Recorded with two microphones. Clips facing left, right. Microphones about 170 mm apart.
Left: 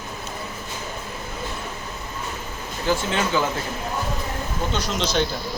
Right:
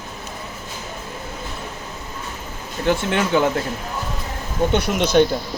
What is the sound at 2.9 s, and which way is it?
Speech, 60° right (ahead or behind).